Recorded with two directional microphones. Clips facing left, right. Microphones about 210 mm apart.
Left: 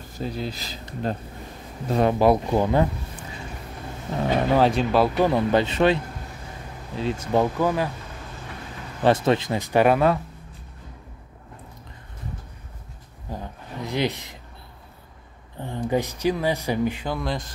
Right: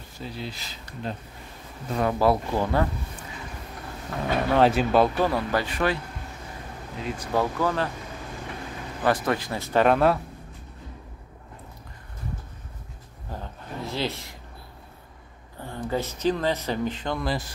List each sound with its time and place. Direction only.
0.2 s speech: 40° left (ahead or behind)
1.9 s speech: 25° left (ahead or behind)
4.1 s speech: 25° left (ahead or behind)
4.6 s speech: centre (ahead or behind)
5.1 s speech: 20° left (ahead or behind)
7.0 s speech: 25° left (ahead or behind)
9.0 s speech: 25° left (ahead or behind); by 10.1 s 5° left (ahead or behind)
13.3 s a sound: 15° left (ahead or behind)
15.6 s a sound: 20° left (ahead or behind)
15.9 s speech: 15° left (ahead or behind); by 17.5 s centre (ahead or behind)